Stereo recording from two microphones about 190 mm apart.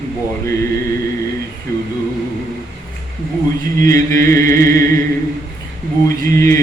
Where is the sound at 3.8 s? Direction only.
15° left (ahead or behind).